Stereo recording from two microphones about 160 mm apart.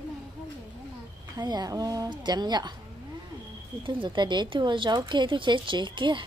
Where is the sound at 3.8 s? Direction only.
30° right (ahead or behind).